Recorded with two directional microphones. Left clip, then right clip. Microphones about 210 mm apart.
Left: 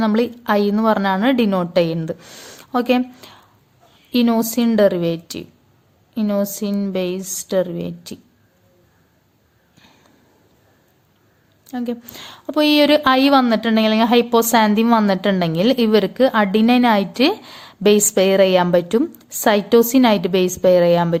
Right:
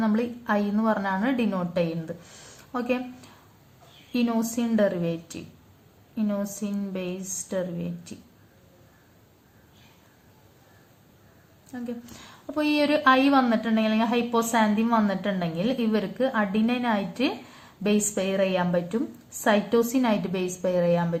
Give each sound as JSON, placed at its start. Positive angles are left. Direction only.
{"t": 0.0, "sound": "a woman's voice", "side_deg": 45}
{"t": 11.7, "sound": "a woman's voice", "side_deg": 40}